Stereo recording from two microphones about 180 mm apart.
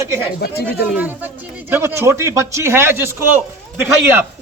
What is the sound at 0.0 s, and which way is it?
Speech, 15° right (ahead or behind).